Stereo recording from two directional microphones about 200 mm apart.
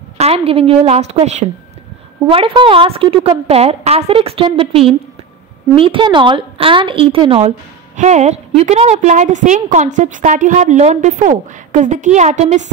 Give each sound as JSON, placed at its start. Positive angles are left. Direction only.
{"t": 0.2, "sound": "a woman's voice", "side_deg": -30}